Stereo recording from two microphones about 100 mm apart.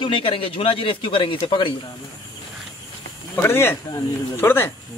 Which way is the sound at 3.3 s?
25° left (ahead or behind).